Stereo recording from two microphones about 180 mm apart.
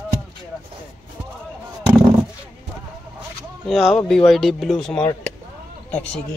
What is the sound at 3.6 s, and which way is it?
Speech, centre (ahead or behind).